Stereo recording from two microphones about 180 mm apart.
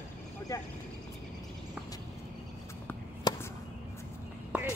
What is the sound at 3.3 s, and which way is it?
Chop, 20° left (ahead or behind).